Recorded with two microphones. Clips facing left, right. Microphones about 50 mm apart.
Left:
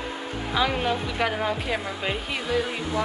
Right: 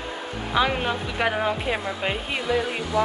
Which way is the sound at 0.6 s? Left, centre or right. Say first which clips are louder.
Right 1 dB; centre.